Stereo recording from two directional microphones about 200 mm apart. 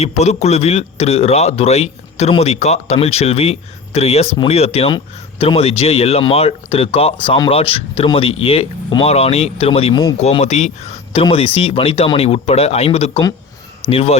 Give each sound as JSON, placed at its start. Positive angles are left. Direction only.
{"t": 0.0, "sound": "a man's voice", "side_deg": 35}
{"t": 10.2, "sound": "a man's voice", "side_deg": 30}